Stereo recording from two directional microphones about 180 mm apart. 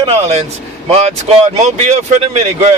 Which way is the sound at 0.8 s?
40° right (ahead or behind).